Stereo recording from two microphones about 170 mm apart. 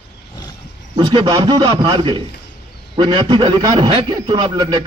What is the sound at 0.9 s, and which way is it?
A man's voice, 30° right (ahead or behind).